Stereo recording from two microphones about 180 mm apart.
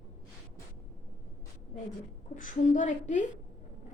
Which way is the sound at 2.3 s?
45° left (ahead or behind).